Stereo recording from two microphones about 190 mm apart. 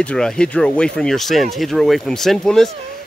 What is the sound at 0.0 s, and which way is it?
Speech, 5° left (ahead or behind).